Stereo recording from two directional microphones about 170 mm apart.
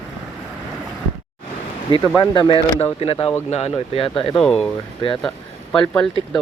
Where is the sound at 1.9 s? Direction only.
25° left (ahead or behind).